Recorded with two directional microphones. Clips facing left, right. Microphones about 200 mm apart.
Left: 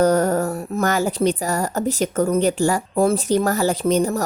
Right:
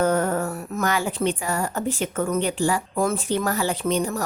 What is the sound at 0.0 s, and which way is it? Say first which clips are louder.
A woman's voice: left 5 dB; 40° left (ahead or behind).